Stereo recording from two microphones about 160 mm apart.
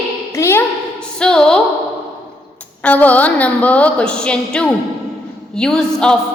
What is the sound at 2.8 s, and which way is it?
A woman's voice, 10° left (ahead or behind).